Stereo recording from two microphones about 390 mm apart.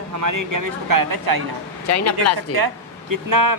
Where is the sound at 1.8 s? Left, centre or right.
Left.